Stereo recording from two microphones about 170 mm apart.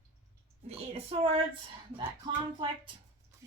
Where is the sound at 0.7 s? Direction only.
35° right (ahead or behind).